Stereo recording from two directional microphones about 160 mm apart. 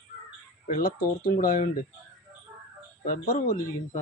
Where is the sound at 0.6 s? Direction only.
60° left (ahead or behind).